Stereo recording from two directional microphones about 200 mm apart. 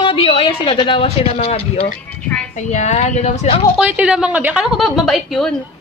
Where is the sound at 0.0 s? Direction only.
30° left (ahead or behind).